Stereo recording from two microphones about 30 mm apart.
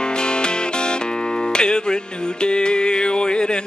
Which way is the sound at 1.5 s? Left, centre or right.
Left.